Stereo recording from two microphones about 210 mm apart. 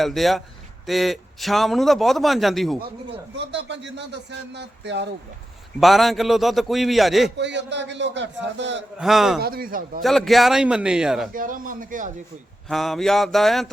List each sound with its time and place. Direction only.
0.0 s a man's voice: centre (ahead or behind)
3.3 s a man's voice: 55° right (ahead or behind)
5.8 s a man's voice: centre (ahead or behind)
7.3 s a man's voice: 55° right (ahead or behind)
9.0 s a man's voice: centre (ahead or behind)
9.4 s speech: 45° right (ahead or behind)
10.0 s a man's voice: centre (ahead or behind)
11.3 s speech: 40° right (ahead or behind)
12.6 s a man's voice: centre (ahead or behind)